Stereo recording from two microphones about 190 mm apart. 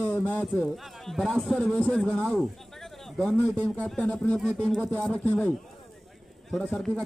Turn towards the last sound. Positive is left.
turn(degrees=5)  # may be behind; listen again after turning